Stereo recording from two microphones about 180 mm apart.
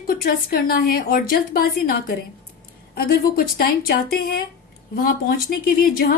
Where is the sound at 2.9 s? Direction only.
55° left (ahead or behind).